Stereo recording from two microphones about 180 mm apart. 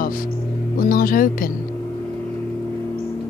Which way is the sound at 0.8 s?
50° left (ahead or behind).